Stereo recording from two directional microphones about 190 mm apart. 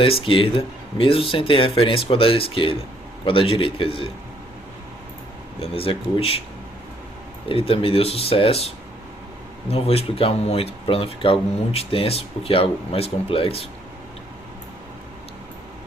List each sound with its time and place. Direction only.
0.0 s speech: 30° left (ahead or behind)
5.5 s speech: 30° left (ahead or behind)
7.4 s speech: 30° left (ahead or behind)